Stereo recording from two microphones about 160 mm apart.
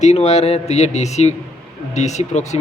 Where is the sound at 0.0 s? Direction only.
45° left (ahead or behind).